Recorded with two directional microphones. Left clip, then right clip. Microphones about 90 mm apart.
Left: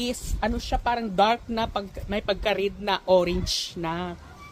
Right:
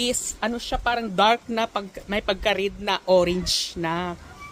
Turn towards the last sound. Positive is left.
turn(degrees=-30)  # may be behind; listen again after turning